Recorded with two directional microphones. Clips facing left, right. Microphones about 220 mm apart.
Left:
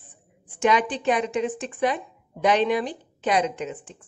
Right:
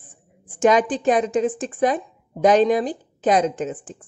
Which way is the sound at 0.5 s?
45° right (ahead or behind).